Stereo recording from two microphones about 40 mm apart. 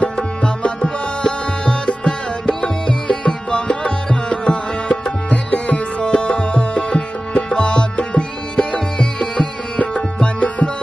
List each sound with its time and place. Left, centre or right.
0.0 s music: left
3.3 s tabla: left
5.5 s music: left